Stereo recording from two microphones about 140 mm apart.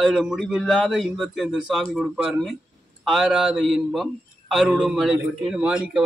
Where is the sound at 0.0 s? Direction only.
Centre (ahead or behind).